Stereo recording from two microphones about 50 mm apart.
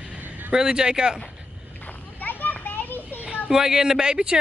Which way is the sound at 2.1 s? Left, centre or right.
Left.